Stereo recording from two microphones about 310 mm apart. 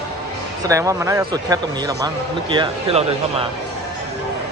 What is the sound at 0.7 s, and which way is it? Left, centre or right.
Speech, centre.